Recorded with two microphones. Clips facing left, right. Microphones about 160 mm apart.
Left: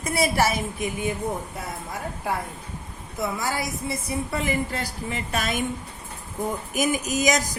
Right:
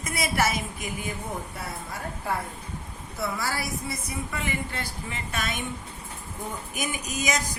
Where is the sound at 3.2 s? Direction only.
20° left (ahead or behind); by 5.6 s 40° left (ahead or behind).